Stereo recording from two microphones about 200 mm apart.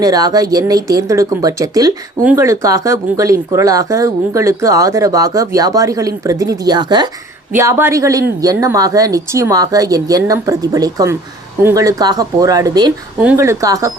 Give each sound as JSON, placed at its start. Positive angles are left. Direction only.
{"t": 0.0, "sound": "a woman's voice", "side_deg": -20}